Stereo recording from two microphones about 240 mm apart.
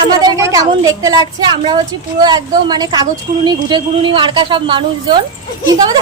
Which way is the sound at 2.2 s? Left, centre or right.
Centre.